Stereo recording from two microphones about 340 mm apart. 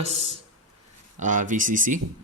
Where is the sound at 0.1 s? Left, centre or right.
Centre.